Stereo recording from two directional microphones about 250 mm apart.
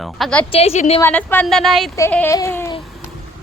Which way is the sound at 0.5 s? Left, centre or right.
Left.